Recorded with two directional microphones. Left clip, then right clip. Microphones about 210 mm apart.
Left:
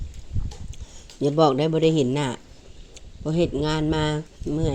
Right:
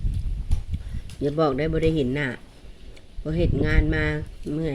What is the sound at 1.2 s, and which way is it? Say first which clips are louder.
Speech: left 3 dB; 25° left (ahead or behind).